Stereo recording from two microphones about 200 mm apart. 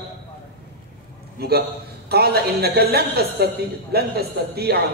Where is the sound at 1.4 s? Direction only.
50° right (ahead or behind).